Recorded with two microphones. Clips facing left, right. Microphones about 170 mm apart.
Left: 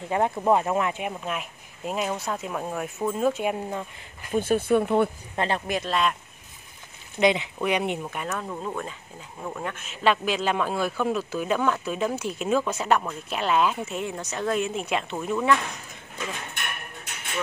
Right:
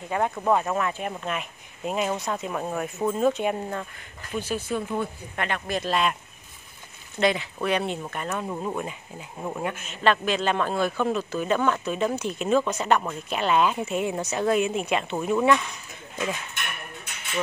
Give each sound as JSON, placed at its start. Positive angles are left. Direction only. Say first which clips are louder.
{"t": 0.1, "sound": "speech", "louder": "left 1 dB", "side_deg": 25}
{"t": 1.2, "sound": "a man's voice", "louder": "right 1 dB", "side_deg": 0}
{"t": 4.3, "sound": "speech", "louder": "left 7 dB", "side_deg": 50}
{"t": 5.3, "sound": "speech", "louder": "left 3 dB", "side_deg": 30}
{"t": 5.9, "sound": "a man's voice", "louder": "right 1 dB", "side_deg": -5}
{"t": 7.2, "sound": "speech", "louder": "left 2 dB", "side_deg": 20}
{"t": 8.0, "sound": "a man's voice", "louder": "even", "side_deg": 5}
{"t": 8.4, "sound": "speech", "louder": "right 2 dB", "side_deg": -10}
{"t": 9.8, "sound": "a man's voice", "louder": "left 1 dB", "side_deg": 5}